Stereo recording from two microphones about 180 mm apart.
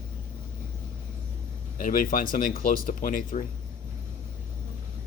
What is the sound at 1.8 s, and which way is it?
Speech, 50° left (ahead or behind).